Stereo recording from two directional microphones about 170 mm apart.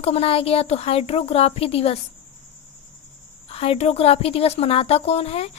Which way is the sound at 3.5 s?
35° left (ahead or behind).